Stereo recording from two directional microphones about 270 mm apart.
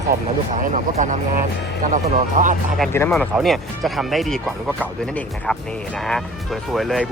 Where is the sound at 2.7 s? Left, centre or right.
Centre.